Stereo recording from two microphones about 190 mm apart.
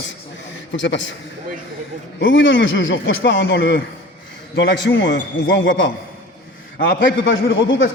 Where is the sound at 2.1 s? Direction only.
75° left (ahead or behind).